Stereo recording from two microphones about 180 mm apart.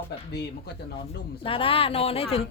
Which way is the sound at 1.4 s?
30° left (ahead or behind).